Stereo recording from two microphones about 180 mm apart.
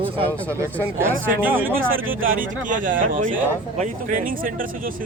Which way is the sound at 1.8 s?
90° right.